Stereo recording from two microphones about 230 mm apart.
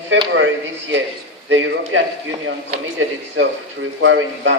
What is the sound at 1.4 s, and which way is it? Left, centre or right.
Speech, right.